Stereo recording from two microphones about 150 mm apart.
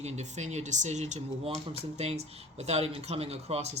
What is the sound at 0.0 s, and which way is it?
Speech, 50° right (ahead or behind).